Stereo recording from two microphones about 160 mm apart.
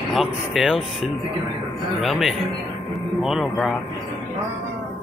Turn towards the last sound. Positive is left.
turn(degrees=0)  # may be behind; listen again after turning